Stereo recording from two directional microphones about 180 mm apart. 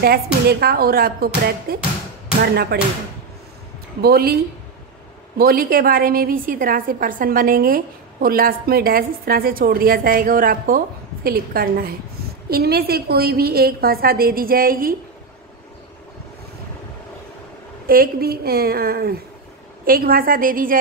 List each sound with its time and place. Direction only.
0.0 s a woman's voice: 60° right (ahead or behind)
4.0 s a woman's voice: 60° right (ahead or behind)
5.4 s a woman's voice: 55° right (ahead or behind)
17.8 s a woman's voice: 55° right (ahead or behind)